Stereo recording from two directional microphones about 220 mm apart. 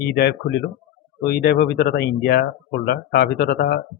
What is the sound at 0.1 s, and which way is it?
Speech, 50° left (ahead or behind).